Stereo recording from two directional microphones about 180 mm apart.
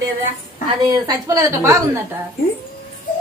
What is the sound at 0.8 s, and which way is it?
A woman's voice, 20° right (ahead or behind).